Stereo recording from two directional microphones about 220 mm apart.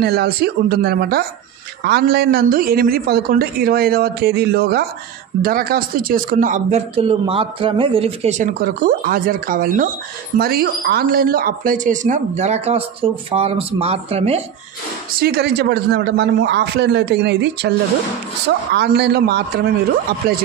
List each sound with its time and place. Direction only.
0.0 s a man's voice: 45° right (ahead or behind); by 14.4 s 30° right (ahead or behind)
15.1 s a man's voice: 45° right (ahead or behind)